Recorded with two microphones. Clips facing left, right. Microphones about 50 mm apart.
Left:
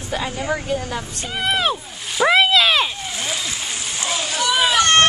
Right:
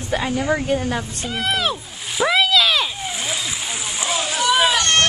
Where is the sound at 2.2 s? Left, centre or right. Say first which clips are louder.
Left 2 dB; left.